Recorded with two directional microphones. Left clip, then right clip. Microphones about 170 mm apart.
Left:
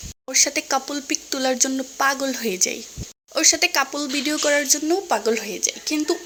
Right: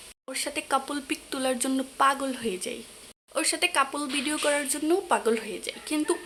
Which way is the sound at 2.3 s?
25° left (ahead or behind).